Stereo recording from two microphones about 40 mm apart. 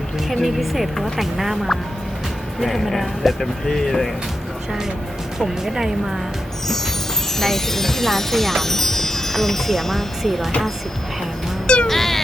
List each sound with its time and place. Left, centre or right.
0.4 s speech: centre
3.7 s chime: centre
5.4 s speech: centre
7.3 s chime: centre
11.6 s cat: left
11.9 s music: centre